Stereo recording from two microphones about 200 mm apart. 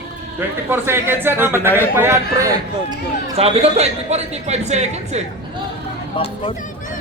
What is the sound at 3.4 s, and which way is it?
A man's voice, 30° right (ahead or behind).